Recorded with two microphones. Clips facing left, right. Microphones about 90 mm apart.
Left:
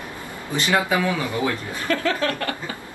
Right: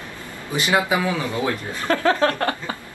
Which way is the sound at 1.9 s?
30° right (ahead or behind).